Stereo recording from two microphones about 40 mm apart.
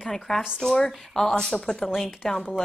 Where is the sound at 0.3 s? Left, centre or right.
Centre.